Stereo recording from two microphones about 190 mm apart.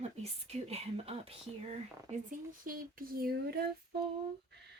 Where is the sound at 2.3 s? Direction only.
50° right (ahead or behind).